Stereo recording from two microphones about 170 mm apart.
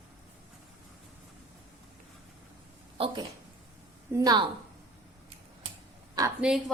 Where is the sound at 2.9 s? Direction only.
30° right (ahead or behind).